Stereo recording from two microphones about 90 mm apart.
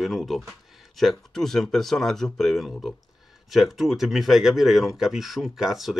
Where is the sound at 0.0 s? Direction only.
Centre (ahead or behind).